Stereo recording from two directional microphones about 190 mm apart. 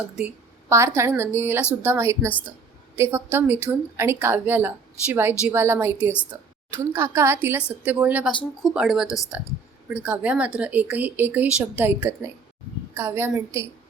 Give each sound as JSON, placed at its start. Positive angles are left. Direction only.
{"t": 0.7, "sound": "a woman's voice", "side_deg": -15}
{"t": 9.0, "sound": "speech", "side_deg": 15}
{"t": 9.9, "sound": "speech", "side_deg": -10}